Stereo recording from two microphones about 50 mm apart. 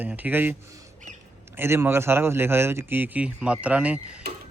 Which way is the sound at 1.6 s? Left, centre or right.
Right.